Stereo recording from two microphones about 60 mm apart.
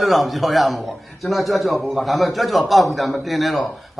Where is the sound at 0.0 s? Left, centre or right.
Centre.